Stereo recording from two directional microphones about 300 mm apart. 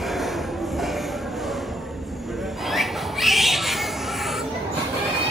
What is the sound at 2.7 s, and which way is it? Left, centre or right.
Bird, centre.